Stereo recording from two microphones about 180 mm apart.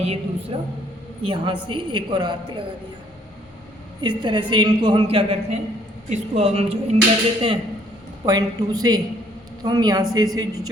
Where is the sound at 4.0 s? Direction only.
25° right (ahead or behind).